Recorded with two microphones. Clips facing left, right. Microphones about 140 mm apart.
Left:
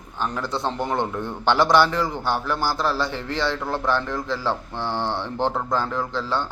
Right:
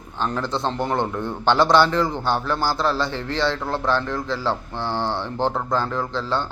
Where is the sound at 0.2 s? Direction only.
10° left (ahead or behind).